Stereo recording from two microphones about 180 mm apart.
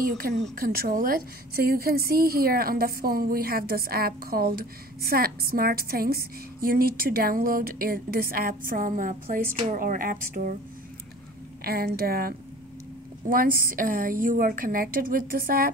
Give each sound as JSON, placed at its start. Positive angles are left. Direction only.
{"t": 0.6, "sound": "a woman's voice", "side_deg": -55}
{"t": 11.6, "sound": "a woman's voice", "side_deg": -60}